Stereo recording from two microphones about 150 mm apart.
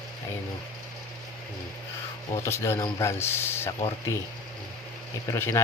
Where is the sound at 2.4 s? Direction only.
15° left (ahead or behind).